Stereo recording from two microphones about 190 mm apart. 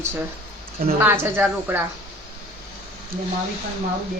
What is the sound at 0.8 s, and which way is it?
Speech, 50° right (ahead or behind).